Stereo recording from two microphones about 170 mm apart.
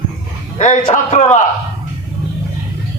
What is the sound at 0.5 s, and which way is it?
Speech, 45° left (ahead or behind).